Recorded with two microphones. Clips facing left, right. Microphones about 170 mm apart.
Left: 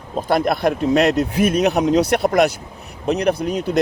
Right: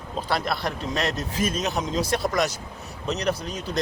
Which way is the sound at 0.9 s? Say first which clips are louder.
Left 10 dB; 65° left (ahead or behind).